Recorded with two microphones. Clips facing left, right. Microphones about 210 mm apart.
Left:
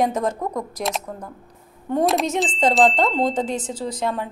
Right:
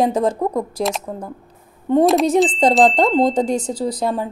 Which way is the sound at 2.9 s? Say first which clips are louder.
Right 5 dB; 40° right (ahead or behind).